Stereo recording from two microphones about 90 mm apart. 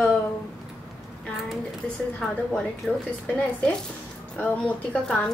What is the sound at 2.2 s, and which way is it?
Speech, 5° left (ahead or behind).